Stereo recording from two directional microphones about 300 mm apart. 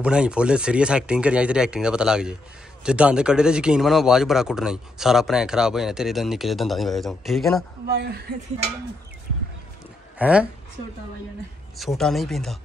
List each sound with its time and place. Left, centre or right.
0.0 s speech: centre
7.8 s speech: right
10.1 s a woman's voice: centre
11.8 s speech: centre